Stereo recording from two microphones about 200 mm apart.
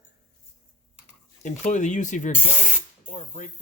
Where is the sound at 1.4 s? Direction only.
35° left (ahead or behind).